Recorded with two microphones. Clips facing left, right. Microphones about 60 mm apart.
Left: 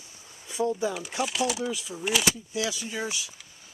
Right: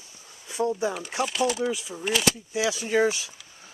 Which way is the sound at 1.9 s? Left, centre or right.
Centre.